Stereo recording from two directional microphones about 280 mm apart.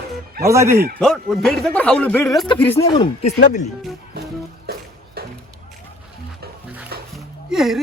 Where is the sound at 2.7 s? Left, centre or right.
Centre.